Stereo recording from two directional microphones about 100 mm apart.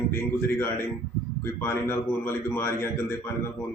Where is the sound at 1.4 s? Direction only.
25° left (ahead or behind).